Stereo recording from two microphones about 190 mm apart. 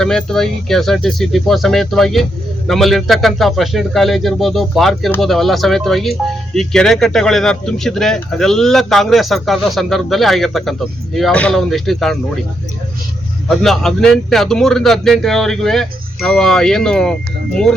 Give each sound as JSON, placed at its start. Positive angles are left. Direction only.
{"t": 0.0, "sound": "speech", "side_deg": 5}
{"t": 13.5, "sound": "speech", "side_deg": 0}